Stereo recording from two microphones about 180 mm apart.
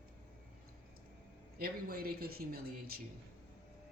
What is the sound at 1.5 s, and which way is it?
Speech, 55° right (ahead or behind).